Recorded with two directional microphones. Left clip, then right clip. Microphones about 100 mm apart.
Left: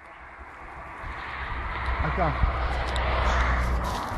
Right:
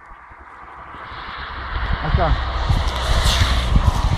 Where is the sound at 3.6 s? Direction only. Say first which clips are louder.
Right 5 dB; 30° right (ahead or behind).